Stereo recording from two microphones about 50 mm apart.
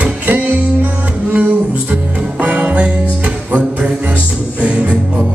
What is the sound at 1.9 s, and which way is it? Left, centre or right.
Music, right.